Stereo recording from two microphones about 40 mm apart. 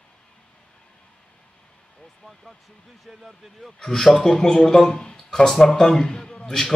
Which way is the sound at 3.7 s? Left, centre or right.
Centre.